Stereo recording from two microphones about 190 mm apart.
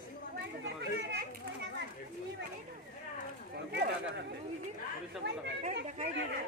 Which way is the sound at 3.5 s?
60° right (ahead or behind).